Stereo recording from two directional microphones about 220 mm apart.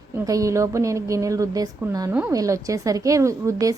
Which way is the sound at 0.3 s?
15° right (ahead or behind).